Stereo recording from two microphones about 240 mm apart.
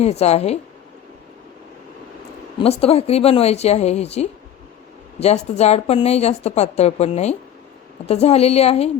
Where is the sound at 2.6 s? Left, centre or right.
Left.